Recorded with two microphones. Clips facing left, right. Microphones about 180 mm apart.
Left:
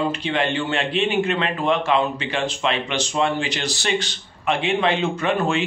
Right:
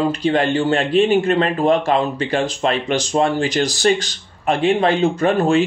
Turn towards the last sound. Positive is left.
turn(degrees=-40)  # may be behind; listen again after turning